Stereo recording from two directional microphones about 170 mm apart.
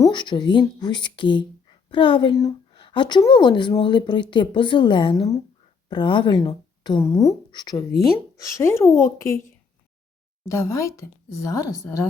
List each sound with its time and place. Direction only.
0.0 s speech: 25° left (ahead or behind)
10.4 s speech: 15° left (ahead or behind)